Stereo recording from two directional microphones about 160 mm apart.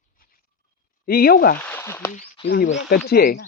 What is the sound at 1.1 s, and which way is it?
Speech, 70° left (ahead or behind).